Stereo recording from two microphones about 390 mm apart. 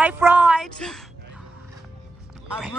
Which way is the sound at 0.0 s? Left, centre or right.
Centre.